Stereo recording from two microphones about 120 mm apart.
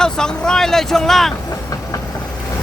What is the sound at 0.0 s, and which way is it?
Speech, 5° left (ahead or behind).